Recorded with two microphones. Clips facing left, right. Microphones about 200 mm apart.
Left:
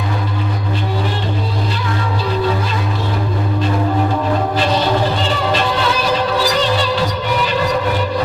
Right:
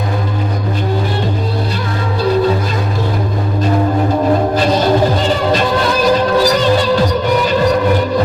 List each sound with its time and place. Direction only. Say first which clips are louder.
4.5 s music: right 4 dB; 45° right (ahead or behind)